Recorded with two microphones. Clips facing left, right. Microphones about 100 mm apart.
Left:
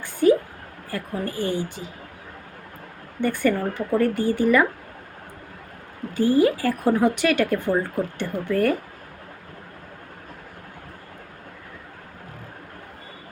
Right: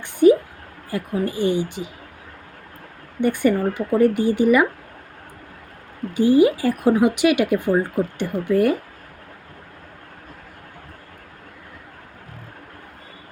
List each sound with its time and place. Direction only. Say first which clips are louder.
0.0 s a sound: right 4 dB; 20° right (ahead or behind)
0.9 s speech: right 5 dB; 15° right (ahead or behind)
3.2 s speech: right 3 dB; 15° right (ahead or behind)
6.1 s speech: right 3 dB; 15° right (ahead or behind)